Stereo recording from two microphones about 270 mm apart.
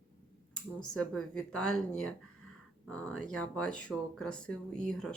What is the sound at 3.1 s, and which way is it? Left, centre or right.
Speech, left.